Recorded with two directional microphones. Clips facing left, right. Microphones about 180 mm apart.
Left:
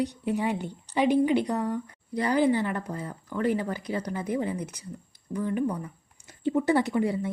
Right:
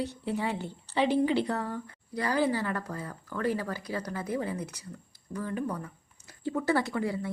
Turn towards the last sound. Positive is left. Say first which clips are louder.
# left 5 dB
turn(degrees=20)  # may be behind; listen again after turning